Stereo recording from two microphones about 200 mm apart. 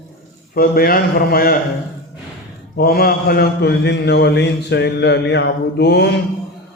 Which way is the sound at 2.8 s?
50° left (ahead or behind).